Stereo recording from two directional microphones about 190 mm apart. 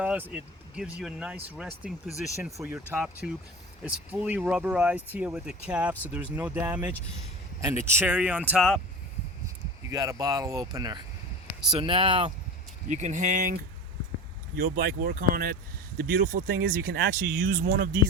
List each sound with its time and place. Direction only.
0.0 s speech: 5° right (ahead or behind)
9.9 s speech: 15° right (ahead or behind)
12.9 s speech: 40° right (ahead or behind)